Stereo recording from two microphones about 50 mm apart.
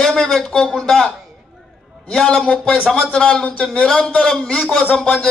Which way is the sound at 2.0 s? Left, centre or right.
Centre.